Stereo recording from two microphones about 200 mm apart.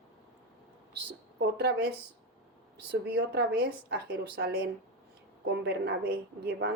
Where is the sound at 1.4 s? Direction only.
55° right (ahead or behind).